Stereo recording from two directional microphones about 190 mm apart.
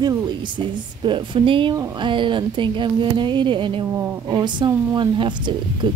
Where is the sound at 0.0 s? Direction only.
20° right (ahead or behind).